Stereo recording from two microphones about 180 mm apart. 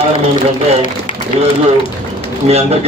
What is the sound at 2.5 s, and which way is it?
Speech, 35° right (ahead or behind).